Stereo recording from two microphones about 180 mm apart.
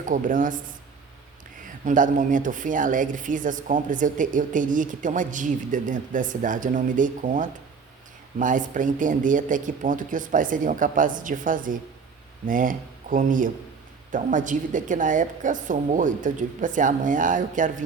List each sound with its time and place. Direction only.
0.0 s speech: 45° right (ahead or behind)
1.6 s speech: 45° right (ahead or behind)